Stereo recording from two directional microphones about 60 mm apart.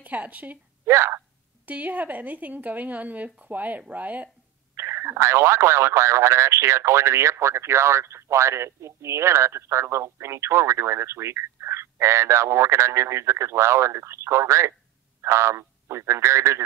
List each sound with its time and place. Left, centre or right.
0.0 s speech: right
0.8 s speech: right
1.7 s speech: right
4.7 s speech: right